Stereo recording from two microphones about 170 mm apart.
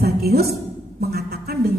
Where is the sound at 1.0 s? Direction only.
70° right (ahead or behind).